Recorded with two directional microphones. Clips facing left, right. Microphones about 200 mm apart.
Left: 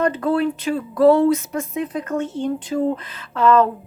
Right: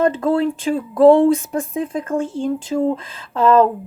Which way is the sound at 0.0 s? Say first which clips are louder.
Right 2 dB; 25° right (ahead or behind).